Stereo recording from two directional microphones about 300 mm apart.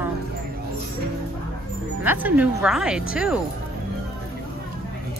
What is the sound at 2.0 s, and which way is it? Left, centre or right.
Speech, centre.